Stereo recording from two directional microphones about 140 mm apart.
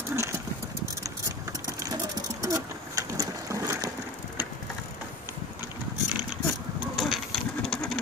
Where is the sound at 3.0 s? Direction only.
25° right (ahead or behind).